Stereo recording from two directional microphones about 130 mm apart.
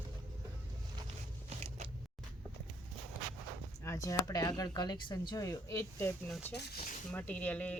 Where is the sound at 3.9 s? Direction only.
25° left (ahead or behind).